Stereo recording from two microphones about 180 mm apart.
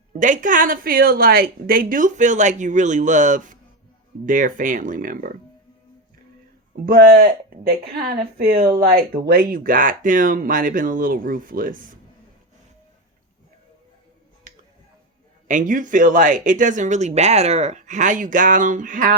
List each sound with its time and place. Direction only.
0.2 s speech: 45° right (ahead or behind)
6.8 s speech: 55° right (ahead or behind)
8.8 s speech: 55° right (ahead or behind)
15.4 s speech: 45° right (ahead or behind)